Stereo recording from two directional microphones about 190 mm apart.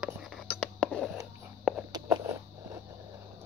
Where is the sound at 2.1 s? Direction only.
15° right (ahead or behind).